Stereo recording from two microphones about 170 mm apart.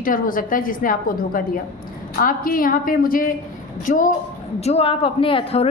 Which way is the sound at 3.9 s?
50° left (ahead or behind).